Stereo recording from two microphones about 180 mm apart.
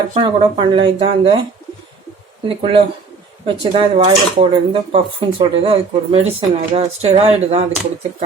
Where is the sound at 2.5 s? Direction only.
30° right (ahead or behind).